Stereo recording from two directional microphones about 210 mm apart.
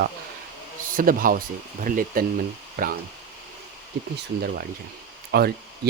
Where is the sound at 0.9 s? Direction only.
40° right (ahead or behind).